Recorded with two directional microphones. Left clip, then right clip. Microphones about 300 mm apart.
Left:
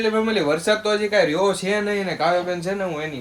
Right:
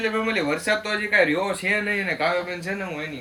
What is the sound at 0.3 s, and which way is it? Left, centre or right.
Speech, centre.